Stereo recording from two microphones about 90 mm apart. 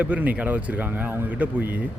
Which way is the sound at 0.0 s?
15° right (ahead or behind).